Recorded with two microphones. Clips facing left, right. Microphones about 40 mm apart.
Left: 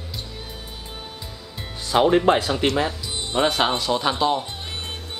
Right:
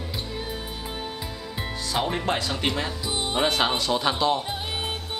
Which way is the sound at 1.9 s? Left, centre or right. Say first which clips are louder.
Left 10 dB; left.